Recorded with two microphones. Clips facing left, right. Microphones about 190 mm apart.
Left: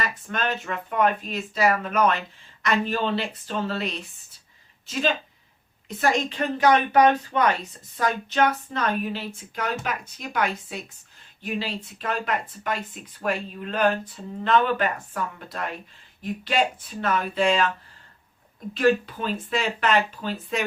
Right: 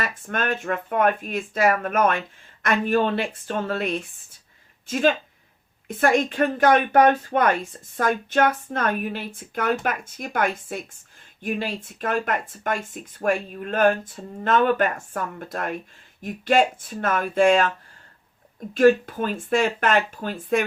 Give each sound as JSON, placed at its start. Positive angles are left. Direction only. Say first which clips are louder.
{"t": 0.0, "sound": "speech", "louder": "right 1 dB", "side_deg": -50}
{"t": 18.7, "sound": "speech", "louder": "right 5 dB", "side_deg": -45}